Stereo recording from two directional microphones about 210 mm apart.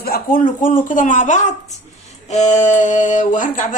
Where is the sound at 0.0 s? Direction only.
45° left (ahead or behind).